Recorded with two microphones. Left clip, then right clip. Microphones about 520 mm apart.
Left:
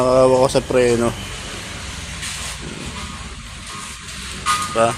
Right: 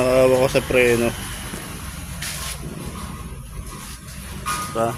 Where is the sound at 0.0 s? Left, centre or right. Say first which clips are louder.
Left 3 dB; right.